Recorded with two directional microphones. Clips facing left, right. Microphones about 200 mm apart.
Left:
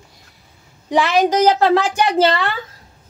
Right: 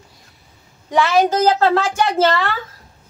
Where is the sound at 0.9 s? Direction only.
15° left (ahead or behind).